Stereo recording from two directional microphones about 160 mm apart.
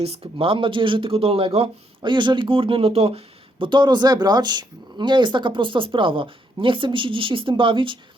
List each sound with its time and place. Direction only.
0.0 s speech: 35° right (ahead or behind)